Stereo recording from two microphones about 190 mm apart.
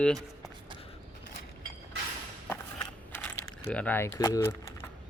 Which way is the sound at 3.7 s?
10° left (ahead or behind).